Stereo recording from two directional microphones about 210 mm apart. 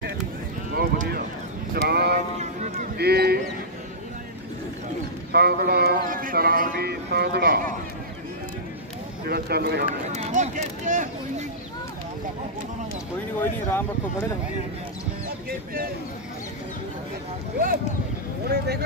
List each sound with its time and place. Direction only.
0.7 s clip-clop: 45° right (ahead or behind)
1.8 s speech: 50° right (ahead or behind)
5.3 s speech: 50° right (ahead or behind)
9.2 s speech: 45° right (ahead or behind)
10.1 s speech: 35° right (ahead or behind)
13.4 s speech: 10° left (ahead or behind)
18.5 s speech: 50° right (ahead or behind)